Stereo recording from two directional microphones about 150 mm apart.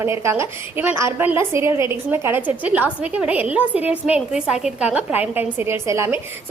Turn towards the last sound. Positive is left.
turn(degrees=-15)  # may be behind; listen again after turning